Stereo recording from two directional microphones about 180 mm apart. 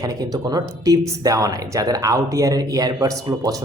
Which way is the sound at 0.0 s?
20° right (ahead or behind).